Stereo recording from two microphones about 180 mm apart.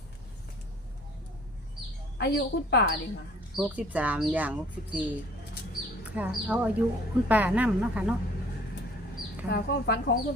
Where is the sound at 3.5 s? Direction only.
5° right (ahead or behind).